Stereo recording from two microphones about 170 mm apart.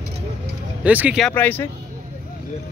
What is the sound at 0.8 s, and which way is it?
Speech, 10° right (ahead or behind).